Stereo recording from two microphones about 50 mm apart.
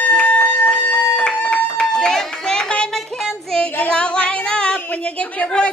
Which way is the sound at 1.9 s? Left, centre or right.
Centre.